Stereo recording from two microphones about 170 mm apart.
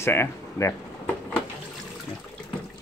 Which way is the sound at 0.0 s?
15° left (ahead or behind).